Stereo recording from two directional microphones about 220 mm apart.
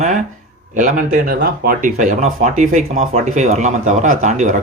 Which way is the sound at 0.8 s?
35° right (ahead or behind).